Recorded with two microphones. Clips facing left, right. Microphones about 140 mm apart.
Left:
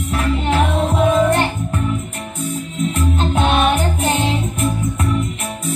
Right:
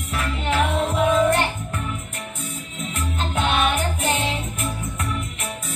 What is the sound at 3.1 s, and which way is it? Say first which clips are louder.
Music: left 4 dB; 25° left (ahead or behind).